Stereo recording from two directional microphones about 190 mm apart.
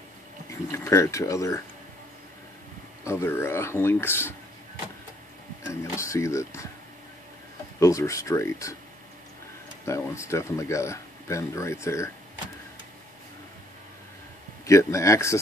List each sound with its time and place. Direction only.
0.5 s speech: 15° left (ahead or behind)
3.0 s speech: 15° left (ahead or behind)
5.7 s speech: 15° left (ahead or behind)
7.8 s speech: 15° left (ahead or behind)
9.8 s speech: 15° left (ahead or behind)
14.7 s speech: 15° left (ahead or behind)